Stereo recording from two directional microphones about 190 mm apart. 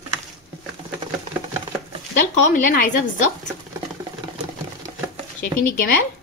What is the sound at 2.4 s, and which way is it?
Speech, 45° left (ahead or behind).